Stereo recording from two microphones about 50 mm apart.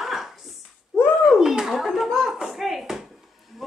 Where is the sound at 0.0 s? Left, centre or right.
Centre.